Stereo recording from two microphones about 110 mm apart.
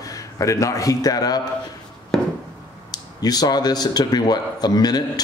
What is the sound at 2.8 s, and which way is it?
Speech, 35° left (ahead or behind).